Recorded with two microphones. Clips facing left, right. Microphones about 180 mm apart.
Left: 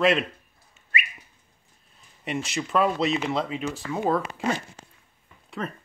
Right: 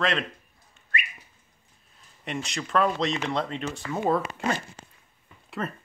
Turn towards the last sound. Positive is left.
turn(degrees=0)  # may be behind; listen again after turning